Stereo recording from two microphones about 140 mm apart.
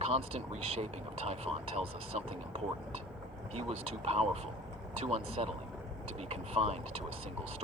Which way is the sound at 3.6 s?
50° right (ahead or behind).